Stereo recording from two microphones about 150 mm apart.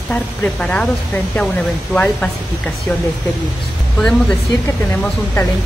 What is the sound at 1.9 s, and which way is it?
Speech, 10° left (ahead or behind).